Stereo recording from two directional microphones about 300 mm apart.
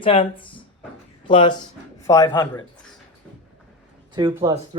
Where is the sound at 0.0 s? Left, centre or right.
Centre.